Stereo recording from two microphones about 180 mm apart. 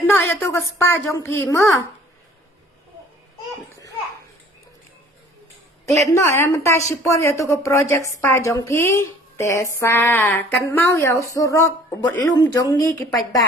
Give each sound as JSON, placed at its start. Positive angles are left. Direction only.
{"t": 0.1, "sound": "a woman's voice", "side_deg": 15}
{"t": 6.1, "sound": "a woman's voice", "side_deg": 15}